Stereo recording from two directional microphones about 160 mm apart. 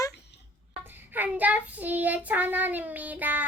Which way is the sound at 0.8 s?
10° right (ahead or behind).